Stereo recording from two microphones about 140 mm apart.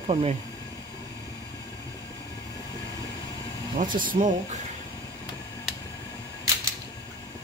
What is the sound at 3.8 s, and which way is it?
Speech, 80° right.